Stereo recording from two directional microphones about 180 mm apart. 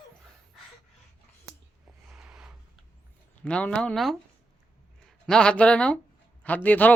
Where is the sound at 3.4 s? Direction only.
5° left (ahead or behind).